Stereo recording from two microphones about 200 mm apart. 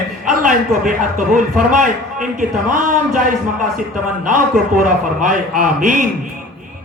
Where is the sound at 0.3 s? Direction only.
40° right (ahead or behind).